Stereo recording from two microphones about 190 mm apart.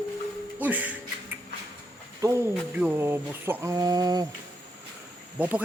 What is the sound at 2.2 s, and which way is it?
A man's voice, 15° right (ahead or behind).